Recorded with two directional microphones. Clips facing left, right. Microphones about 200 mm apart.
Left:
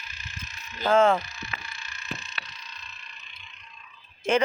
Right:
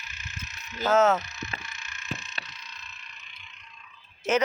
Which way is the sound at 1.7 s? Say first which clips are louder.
Left 1 dB; 35° left (ahead or behind).